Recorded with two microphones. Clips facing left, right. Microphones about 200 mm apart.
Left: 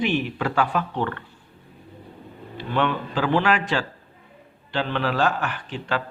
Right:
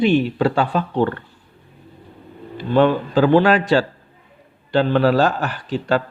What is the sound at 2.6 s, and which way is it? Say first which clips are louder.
A man's voice: right 8 dB; 35° right (ahead or behind).